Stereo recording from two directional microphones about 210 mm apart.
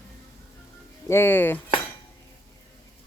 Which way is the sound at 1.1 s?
10° left (ahead or behind).